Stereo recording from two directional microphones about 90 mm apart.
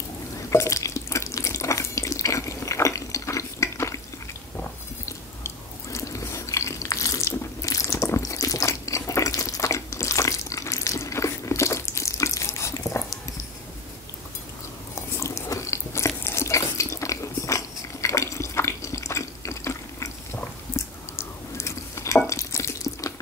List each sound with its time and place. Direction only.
0.5 s water: 35° left (ahead or behind)
5.0 s biting: 35° left (ahead or behind)
15.0 s a sound: 35° left (ahead or behind)